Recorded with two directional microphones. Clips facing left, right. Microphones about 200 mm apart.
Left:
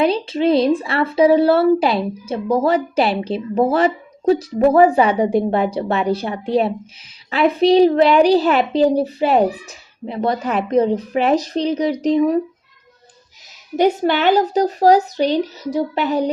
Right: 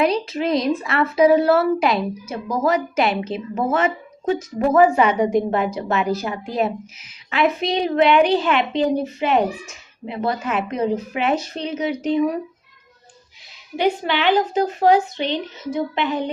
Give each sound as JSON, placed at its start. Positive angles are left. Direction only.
{"t": 0.0, "sound": "a woman's voice", "side_deg": 30}
{"t": 13.7, "sound": "a woman's voice", "side_deg": 45}